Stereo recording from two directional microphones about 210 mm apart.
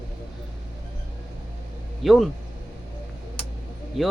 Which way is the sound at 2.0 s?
Centre (ahead or behind).